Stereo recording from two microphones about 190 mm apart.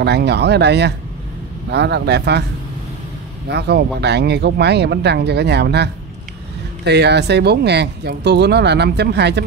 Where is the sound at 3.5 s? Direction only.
60° right (ahead or behind).